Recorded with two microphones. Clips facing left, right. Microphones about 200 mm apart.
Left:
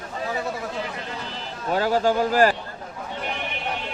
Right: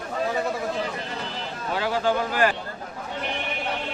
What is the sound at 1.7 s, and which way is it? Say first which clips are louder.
Speech: left 3 dB; 40° left (ahead or behind).